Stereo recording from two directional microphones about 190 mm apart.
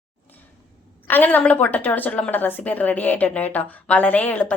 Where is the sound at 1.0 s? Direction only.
10° left (ahead or behind).